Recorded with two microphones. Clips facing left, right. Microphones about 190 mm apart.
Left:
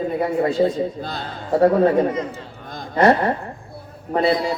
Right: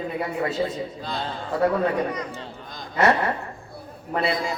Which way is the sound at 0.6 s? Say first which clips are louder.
Left 8 dB; 40° left (ahead or behind).